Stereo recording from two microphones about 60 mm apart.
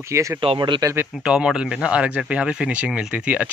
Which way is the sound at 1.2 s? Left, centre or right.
Centre.